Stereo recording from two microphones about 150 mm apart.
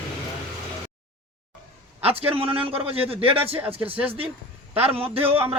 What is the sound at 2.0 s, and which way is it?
Speech, 40° right (ahead or behind).